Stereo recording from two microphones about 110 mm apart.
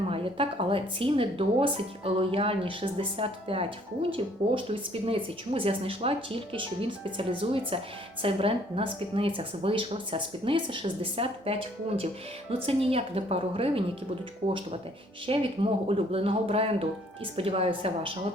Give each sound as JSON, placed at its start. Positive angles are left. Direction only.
{"t": 0.1, "sound": "a woman's voice", "side_deg": -55}
{"t": 15.3, "sound": "a woman's voice", "side_deg": -60}